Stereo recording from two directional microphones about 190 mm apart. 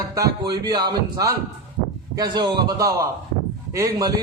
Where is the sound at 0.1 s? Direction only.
20° right (ahead or behind).